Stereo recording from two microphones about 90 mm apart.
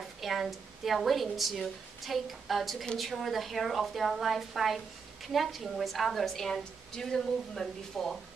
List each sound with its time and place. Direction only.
0.2 s a woman's voice: centre (ahead or behind)